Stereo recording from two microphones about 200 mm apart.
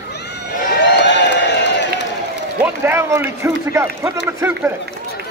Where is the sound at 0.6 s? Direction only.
55° left (ahead or behind).